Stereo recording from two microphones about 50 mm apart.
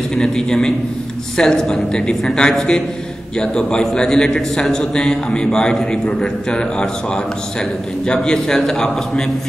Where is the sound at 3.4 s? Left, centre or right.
Centre.